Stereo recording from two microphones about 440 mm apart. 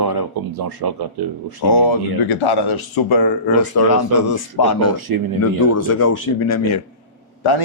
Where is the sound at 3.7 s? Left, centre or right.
Left.